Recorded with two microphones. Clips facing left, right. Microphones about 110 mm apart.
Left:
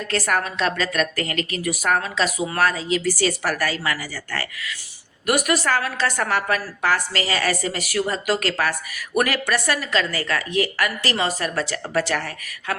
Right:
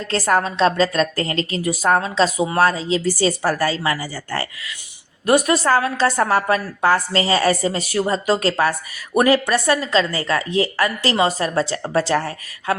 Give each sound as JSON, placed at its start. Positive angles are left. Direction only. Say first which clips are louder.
{"t": 0.0, "sound": "a woman's voice", "louder": "right 4 dB", "side_deg": -25}